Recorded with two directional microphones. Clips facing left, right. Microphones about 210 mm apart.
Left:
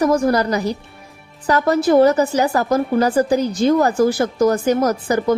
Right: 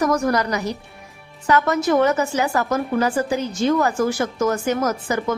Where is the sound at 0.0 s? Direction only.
30° left (ahead or behind).